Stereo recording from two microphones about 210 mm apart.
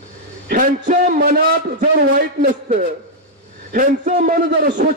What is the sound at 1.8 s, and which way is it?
A man's voice, 40° right (ahead or behind).